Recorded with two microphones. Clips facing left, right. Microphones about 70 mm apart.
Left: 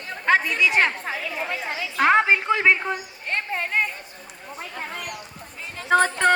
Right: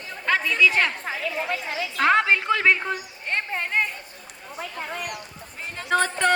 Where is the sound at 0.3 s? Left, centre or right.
Left.